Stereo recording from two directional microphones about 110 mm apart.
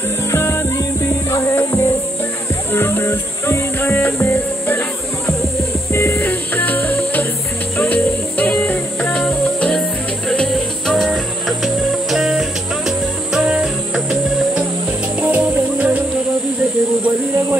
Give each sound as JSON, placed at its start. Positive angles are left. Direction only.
{"t": 0.3, "sound": "music", "side_deg": 25}
{"t": 15.1, "sound": "music", "side_deg": -10}